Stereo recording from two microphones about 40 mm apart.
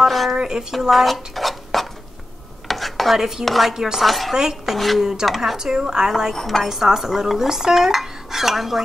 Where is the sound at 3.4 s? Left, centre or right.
Centre.